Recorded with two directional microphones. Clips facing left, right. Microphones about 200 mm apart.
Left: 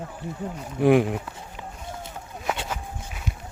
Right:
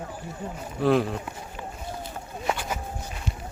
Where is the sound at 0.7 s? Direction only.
15° left (ahead or behind).